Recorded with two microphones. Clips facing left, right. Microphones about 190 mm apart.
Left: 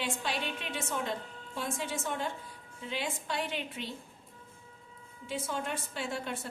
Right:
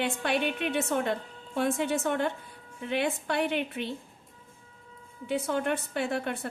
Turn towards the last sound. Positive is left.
turn(degrees=-60)  # may be behind; listen again after turning